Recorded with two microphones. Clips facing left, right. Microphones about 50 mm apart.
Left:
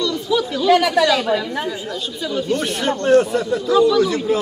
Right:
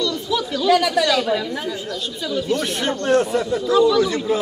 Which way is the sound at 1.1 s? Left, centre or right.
Centre.